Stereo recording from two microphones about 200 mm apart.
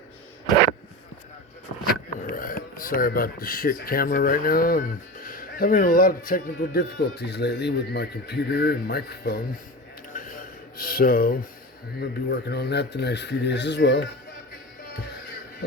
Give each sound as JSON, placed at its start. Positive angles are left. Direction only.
{"t": 2.2, "sound": "speech", "side_deg": 45}
{"t": 10.2, "sound": "a sound", "side_deg": 45}
{"t": 11.9, "sound": "speech", "side_deg": 55}